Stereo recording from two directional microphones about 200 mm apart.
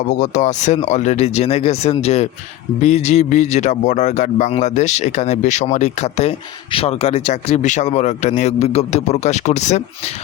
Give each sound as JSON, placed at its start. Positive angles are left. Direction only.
{"t": 0.1, "sound": "speech", "side_deg": 35}